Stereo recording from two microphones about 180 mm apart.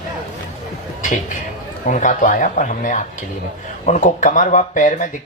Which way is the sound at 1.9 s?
45° left (ahead or behind).